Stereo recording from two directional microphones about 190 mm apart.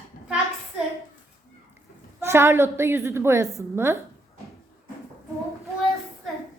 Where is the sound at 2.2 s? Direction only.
15° right (ahead or behind).